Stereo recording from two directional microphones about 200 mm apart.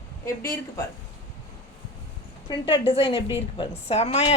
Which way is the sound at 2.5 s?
25° left (ahead or behind).